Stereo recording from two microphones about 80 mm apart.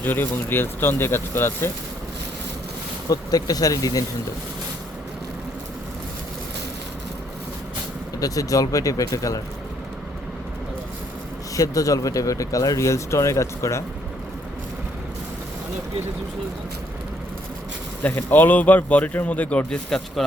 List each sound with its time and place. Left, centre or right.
0.0 s a man's voice: left
3.1 s speech: left
8.2 s speech: left
11.5 s speech: left
18.0 s a man's voice: left